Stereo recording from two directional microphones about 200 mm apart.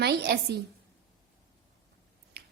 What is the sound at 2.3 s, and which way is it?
Finger snapping, 50° right (ahead or behind).